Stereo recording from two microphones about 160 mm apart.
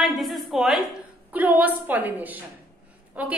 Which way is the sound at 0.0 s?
Centre (ahead or behind).